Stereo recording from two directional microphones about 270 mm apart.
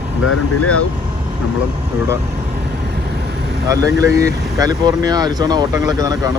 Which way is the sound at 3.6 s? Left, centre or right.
Centre.